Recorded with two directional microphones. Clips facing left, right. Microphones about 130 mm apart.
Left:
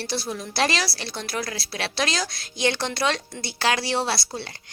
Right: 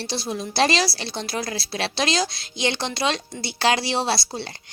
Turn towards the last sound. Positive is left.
turn(degrees=-25)  # may be behind; listen again after turning